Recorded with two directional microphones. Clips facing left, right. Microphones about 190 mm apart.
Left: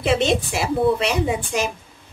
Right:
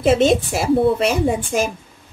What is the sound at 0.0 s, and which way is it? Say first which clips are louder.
A woman's voice: right 5 dB; 45° right (ahead or behind).